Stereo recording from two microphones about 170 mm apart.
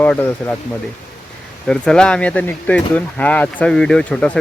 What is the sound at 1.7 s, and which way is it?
Speech, 5° left (ahead or behind).